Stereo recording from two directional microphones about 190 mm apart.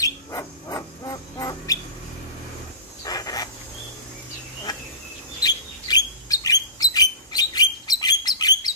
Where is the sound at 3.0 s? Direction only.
20° left (ahead or behind).